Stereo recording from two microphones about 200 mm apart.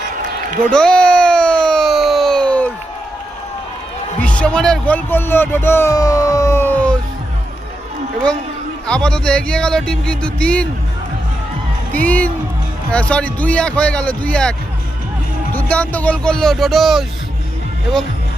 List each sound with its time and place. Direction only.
0.7 s a sound: 5° left (ahead or behind)
4.2 s speech: 5° left (ahead or behind)
8.9 s speech: 5° left (ahead or behind)
11.9 s speech: 10° left (ahead or behind)
15.5 s speech: 5° left (ahead or behind)